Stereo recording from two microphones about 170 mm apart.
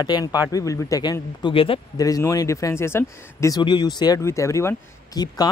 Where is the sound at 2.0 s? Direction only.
20° left (ahead or behind).